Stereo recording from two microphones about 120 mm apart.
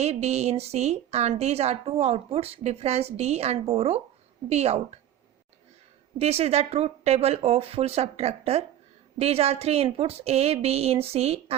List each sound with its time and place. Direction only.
0.0 s a woman's voice: 65° right (ahead or behind)
6.1 s a woman's voice: 60° right (ahead or behind)